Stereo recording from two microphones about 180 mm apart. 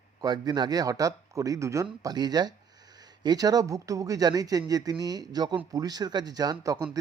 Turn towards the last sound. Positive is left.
turn(degrees=-20)  # may be behind; listen again after turning